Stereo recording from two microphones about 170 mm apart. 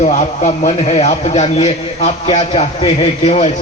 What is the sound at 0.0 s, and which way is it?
A man's voice, 45° left (ahead or behind).